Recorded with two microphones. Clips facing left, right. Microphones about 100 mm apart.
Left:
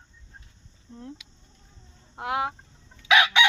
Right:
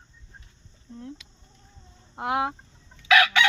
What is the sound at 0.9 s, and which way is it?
Speech, 20° left (ahead or behind).